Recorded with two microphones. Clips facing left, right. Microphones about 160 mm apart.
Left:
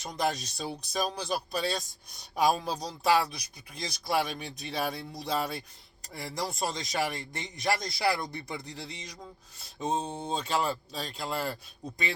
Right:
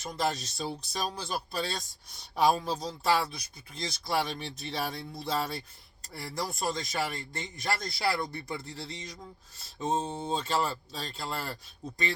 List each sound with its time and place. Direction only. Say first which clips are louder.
0.0 s a man's voice: left 1 dB; 15° left (ahead or behind)